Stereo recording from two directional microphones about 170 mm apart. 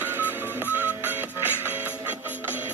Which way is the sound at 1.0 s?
10° right (ahead or behind).